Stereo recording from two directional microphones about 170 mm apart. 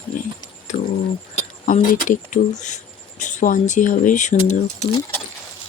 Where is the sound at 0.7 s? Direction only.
35° left (ahead or behind).